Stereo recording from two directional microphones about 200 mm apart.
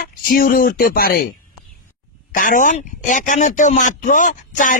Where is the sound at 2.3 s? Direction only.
40° left (ahead or behind).